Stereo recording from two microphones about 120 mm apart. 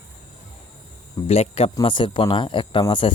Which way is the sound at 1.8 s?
45° left (ahead or behind).